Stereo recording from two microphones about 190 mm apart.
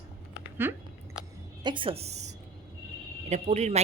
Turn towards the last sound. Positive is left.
turn(degrees=-35)  # may be behind; listen again after turning